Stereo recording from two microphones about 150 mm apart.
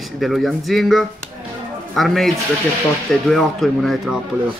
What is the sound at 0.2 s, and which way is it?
Speech, centre (ahead or behind).